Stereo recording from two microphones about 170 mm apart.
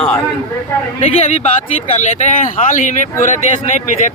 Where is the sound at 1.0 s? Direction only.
40° left (ahead or behind).